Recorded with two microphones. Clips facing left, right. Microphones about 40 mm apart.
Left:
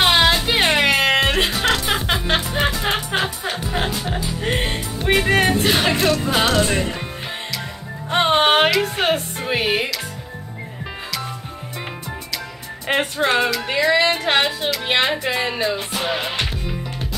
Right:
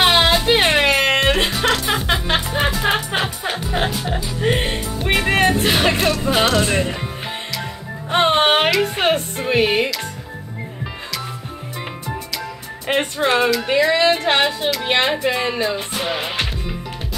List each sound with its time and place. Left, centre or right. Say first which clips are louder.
0.0 s music: right 1 dB; centre
8.1 s speech: right 1 dB; centre
12.8 s speech: right 1 dB; centre